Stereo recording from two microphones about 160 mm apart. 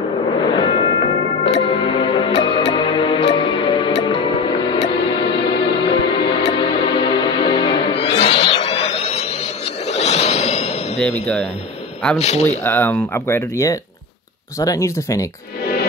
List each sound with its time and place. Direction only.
0.5 s music: 30° left (ahead or behind)
9.8 s a sound: 45° left (ahead or behind)
12.2 s speech: 40° left (ahead or behind)
12.6 s speech: 15° left (ahead or behind)